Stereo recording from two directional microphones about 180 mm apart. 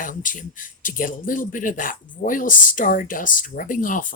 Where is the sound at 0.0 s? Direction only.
45° left (ahead or behind).